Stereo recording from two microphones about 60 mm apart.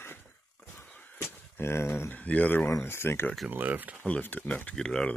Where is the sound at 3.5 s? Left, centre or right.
Right.